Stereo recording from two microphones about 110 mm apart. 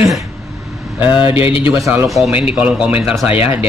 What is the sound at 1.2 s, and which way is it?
Speech, 55° left (ahead or behind).